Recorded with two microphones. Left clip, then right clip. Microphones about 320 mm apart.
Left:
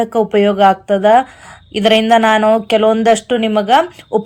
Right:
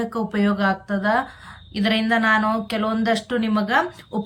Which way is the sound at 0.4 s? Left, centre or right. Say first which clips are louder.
Left 10 dB; centre.